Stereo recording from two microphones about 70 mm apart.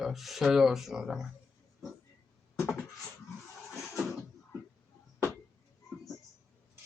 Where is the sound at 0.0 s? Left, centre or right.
Centre.